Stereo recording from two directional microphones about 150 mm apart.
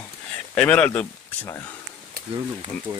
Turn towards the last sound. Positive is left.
turn(degrees=-25)  # may be behind; listen again after turning